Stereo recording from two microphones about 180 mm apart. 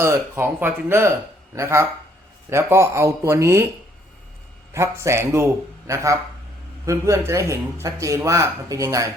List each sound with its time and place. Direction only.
0.0 s speech: 15° right (ahead or behind)
4.7 s speech: 15° right (ahead or behind)